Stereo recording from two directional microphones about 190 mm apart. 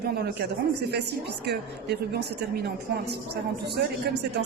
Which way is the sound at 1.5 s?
60° right (ahead or behind).